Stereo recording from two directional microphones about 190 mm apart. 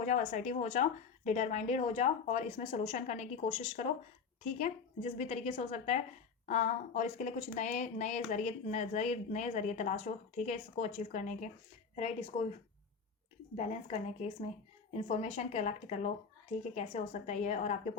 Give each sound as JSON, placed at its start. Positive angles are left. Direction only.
{"t": 0.0, "sound": "a woman's voice", "side_deg": 40}
{"t": 13.6, "sound": "a woman's voice", "side_deg": 35}